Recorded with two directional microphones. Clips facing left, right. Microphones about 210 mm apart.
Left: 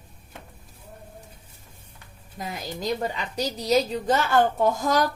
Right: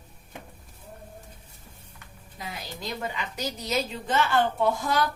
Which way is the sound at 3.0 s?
35° left (ahead or behind).